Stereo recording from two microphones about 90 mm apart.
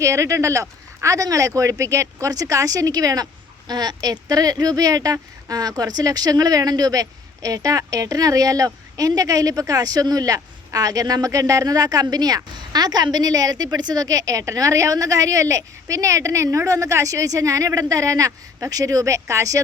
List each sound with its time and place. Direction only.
0.0 s speech: 35° right (ahead or behind)